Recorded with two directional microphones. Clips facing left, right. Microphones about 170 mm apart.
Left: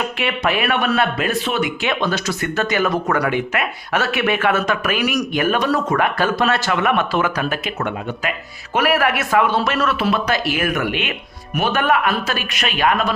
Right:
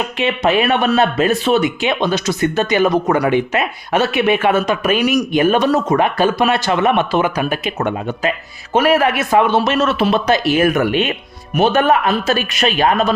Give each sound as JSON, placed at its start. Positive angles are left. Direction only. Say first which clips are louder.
{"t": 0.2, "sound": "speech", "louder": "right 7 dB", "side_deg": -20}